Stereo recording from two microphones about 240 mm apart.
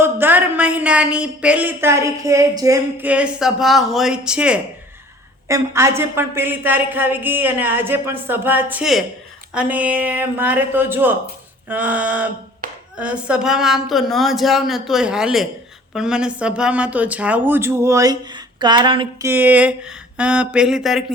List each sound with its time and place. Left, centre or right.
0.0 s a woman's voice: centre
12.6 s a sound: right
13.0 s a woman's voice: centre
19.3 s speech: centre